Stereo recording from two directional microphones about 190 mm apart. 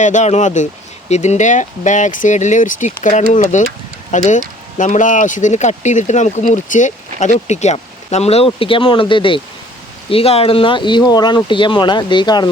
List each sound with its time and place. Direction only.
0.0 s speech: 40° left (ahead or behind); by 12.5 s 20° left (ahead or behind)